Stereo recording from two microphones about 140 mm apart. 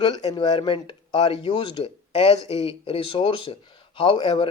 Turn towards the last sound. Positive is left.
turn(degrees=35)  # may be behind; listen again after turning